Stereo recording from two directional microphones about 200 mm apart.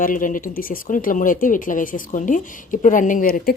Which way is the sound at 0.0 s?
40° left (ahead or behind).